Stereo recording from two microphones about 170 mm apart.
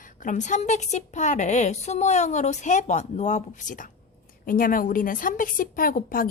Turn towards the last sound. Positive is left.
turn(degrees=55)  # may be behind; listen again after turning